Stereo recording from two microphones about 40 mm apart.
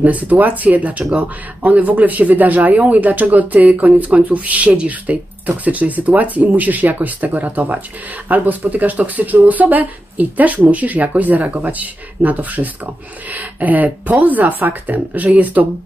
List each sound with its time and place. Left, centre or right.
0.0 s speech: right